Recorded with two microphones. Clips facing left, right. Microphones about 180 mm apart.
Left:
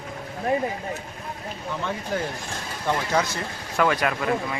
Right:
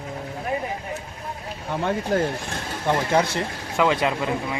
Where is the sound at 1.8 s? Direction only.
55° right (ahead or behind).